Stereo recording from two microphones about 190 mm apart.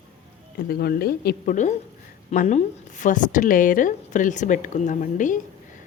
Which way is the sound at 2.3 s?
40° left (ahead or behind).